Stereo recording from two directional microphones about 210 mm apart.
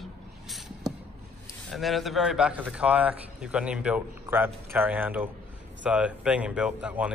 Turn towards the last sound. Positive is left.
turn(degrees=-5)  # may be behind; listen again after turning